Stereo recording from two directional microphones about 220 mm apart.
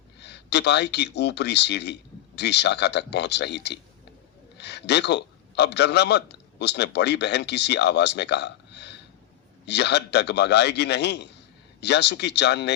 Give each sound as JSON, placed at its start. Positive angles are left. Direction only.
{"t": 0.2, "sound": "a man's voice", "side_deg": 50}